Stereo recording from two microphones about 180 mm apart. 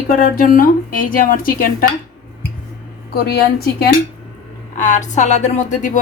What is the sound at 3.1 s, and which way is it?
Speech, 60° left (ahead or behind).